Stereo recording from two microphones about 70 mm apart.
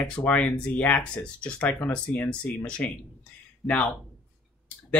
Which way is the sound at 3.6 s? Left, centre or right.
Centre.